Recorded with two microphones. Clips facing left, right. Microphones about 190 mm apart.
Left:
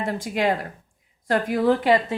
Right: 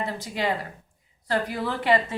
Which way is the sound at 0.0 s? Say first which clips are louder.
Left 5 dB; 50° left (ahead or behind).